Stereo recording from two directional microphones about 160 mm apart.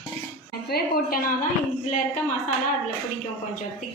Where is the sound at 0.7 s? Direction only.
65° left (ahead or behind).